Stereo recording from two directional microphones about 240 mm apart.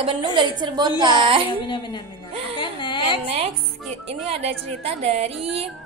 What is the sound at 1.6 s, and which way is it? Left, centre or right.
Speech, centre.